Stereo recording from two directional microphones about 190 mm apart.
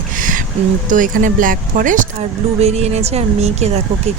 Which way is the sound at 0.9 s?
45° right (ahead or behind).